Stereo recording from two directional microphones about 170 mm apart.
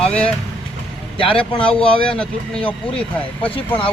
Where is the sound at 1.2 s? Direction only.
30° left (ahead or behind).